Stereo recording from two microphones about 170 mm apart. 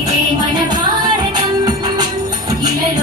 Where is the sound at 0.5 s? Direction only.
25° right (ahead or behind).